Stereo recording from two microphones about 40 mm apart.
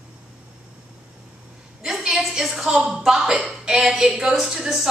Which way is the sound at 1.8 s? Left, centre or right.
Centre.